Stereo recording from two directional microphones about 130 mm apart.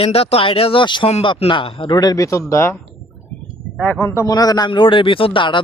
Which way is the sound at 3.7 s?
10° left (ahead or behind).